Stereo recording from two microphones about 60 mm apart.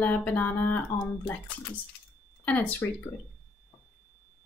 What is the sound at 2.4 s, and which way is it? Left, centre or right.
Speech, left.